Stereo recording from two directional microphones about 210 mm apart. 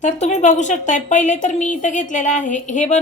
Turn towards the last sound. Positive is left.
turn(degrees=35)  # may be behind; listen again after turning